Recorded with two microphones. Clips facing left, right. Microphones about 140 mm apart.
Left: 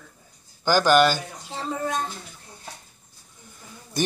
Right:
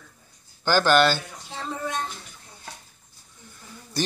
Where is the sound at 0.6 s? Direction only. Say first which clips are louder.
Left 1 dB; 10° left (ahead or behind).